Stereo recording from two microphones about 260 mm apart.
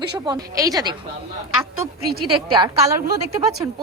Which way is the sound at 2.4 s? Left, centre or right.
Centre.